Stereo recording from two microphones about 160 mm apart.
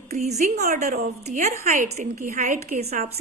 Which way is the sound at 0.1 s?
45° right (ahead or behind).